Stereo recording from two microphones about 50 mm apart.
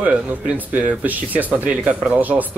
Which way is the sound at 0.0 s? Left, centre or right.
Right.